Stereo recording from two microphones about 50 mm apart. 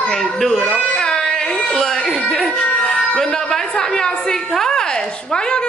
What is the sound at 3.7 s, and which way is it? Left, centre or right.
A woman's voice, centre.